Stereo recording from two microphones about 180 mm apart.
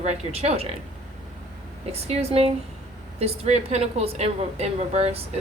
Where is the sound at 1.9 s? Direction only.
35° right (ahead or behind).